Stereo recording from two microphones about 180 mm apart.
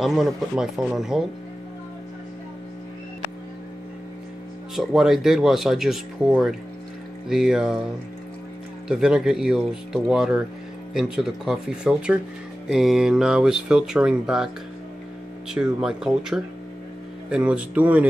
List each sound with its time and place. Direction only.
0.0 s speech: centre (ahead or behind)
4.7 s speech: centre (ahead or behind)
8.8 s speech: 5° right (ahead or behind)
15.5 s speech: 5° right (ahead or behind)